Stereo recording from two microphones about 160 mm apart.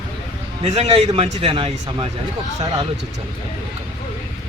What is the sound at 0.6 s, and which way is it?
A man's voice, 40° right (ahead or behind).